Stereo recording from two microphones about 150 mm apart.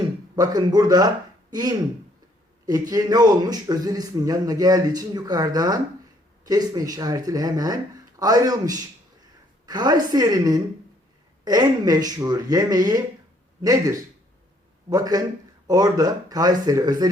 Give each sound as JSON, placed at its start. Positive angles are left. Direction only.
{"t": 0.3, "sound": "a man's voice", "side_deg": -25}